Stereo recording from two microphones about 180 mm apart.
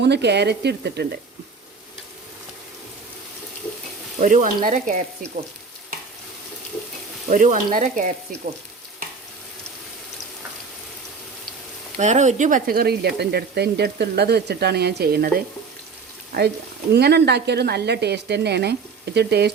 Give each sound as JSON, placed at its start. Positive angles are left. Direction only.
{"t": 0.0, "sound": "speech", "side_deg": -70}
{"t": 4.2, "sound": "speech", "side_deg": -45}
{"t": 7.3, "sound": "speech", "side_deg": -45}
{"t": 11.9, "sound": "speech", "side_deg": -40}
{"t": 16.9, "sound": "speech", "side_deg": -65}